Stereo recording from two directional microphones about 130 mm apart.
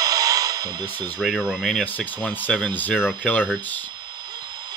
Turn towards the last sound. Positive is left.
turn(degrees=15)  # may be behind; listen again after turning